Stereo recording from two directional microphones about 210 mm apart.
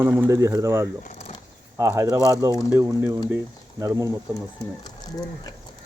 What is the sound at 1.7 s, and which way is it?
Speech, 15° right (ahead or behind).